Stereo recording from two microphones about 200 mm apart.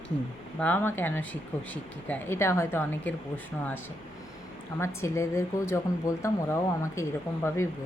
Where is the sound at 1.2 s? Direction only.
75° left (ahead or behind).